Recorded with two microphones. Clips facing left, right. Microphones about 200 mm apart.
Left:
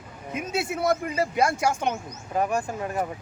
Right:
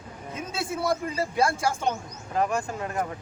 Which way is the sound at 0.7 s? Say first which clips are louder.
Left 1 dB; 20° left (ahead or behind).